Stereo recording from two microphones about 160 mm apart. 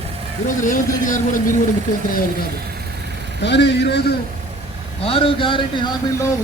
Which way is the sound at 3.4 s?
90° left.